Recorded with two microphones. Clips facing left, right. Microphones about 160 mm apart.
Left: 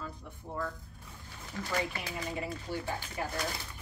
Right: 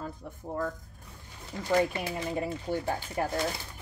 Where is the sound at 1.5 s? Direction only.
25° right (ahead or behind).